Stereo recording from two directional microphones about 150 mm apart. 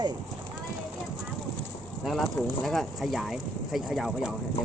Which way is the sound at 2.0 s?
Centre (ahead or behind).